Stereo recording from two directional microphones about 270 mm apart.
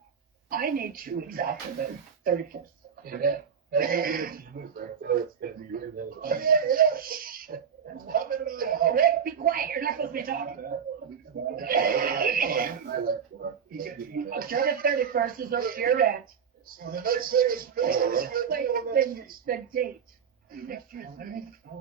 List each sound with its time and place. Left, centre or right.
0.5 s speech: right
3.0 s speech: right